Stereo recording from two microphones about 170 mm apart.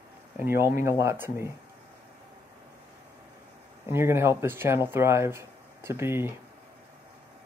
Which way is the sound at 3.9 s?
15° right (ahead or behind).